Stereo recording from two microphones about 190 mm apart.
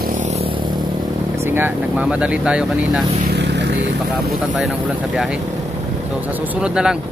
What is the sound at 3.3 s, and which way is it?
Vehicle, 65° right (ahead or behind).